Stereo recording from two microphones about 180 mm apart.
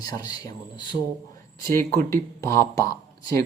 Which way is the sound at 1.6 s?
55° right (ahead or behind).